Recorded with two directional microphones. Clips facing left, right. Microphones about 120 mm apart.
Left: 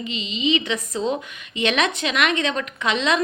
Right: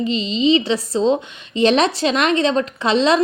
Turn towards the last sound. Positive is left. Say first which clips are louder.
# right 6 dB
turn(degrees=-35)  # may be behind; listen again after turning